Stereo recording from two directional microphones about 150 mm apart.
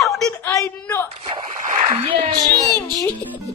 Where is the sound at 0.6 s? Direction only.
15° left (ahead or behind).